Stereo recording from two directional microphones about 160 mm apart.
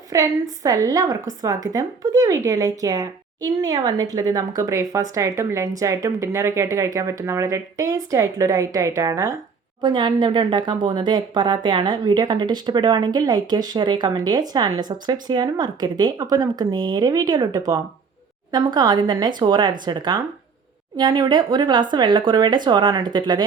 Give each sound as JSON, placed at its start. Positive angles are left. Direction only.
{"t": 0.1, "sound": "speech", "side_deg": -20}